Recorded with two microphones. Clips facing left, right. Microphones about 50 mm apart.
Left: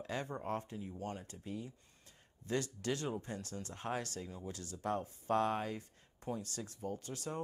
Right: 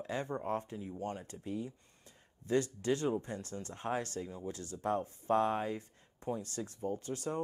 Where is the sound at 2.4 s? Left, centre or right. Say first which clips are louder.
Right 5 dB; right.